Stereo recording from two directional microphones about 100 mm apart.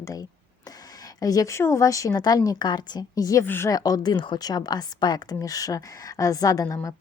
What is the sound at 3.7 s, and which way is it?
Speech, 40° left (ahead or behind).